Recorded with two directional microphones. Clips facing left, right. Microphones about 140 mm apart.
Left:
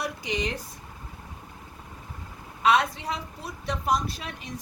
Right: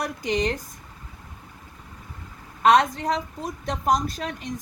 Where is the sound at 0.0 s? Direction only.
50° right (ahead or behind).